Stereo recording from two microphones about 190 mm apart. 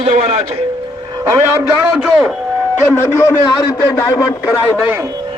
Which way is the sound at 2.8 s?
10° left (ahead or behind).